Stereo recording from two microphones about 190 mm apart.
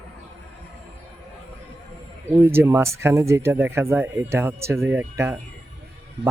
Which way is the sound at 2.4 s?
10° right (ahead or behind).